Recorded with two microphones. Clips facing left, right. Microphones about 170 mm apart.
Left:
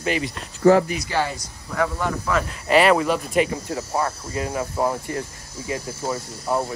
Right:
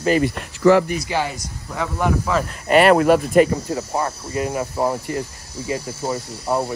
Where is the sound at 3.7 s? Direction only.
15° right (ahead or behind).